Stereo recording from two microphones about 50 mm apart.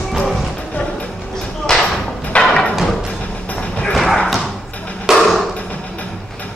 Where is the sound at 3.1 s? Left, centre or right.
Left.